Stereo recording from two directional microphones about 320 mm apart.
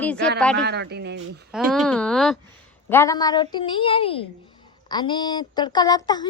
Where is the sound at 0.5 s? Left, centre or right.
Right.